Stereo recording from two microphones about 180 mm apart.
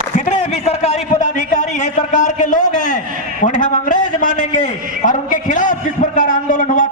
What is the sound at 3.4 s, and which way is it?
A man's voice, 45° left (ahead or behind).